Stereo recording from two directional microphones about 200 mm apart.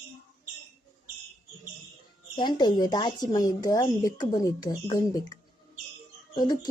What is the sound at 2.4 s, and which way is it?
A woman's voice, 20° left (ahead or behind).